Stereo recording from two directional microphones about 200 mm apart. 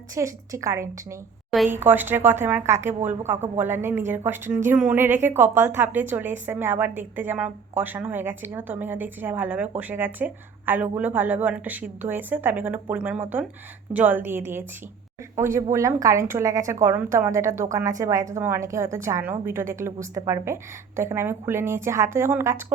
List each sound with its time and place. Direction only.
0.1 s a woman's voice: 15° right (ahead or behind)